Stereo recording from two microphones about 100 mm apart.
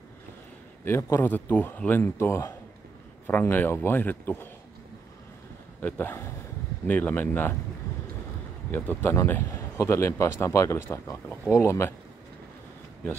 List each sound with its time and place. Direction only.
0.8 s a man's voice: 25° left (ahead or behind)
5.8 s speech: 20° left (ahead or behind)
8.7 s a man's voice: 20° left (ahead or behind)